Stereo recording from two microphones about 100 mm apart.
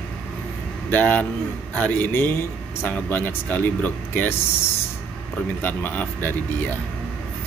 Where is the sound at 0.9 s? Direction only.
15° left (ahead or behind).